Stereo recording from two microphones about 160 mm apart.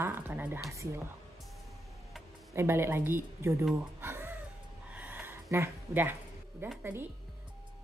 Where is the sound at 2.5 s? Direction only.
15° right (ahead or behind).